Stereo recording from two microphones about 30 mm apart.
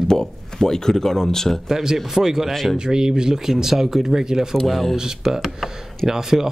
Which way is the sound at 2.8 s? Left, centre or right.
Right.